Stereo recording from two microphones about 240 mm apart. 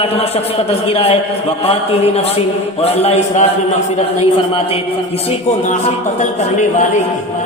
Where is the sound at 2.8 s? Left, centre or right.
Left.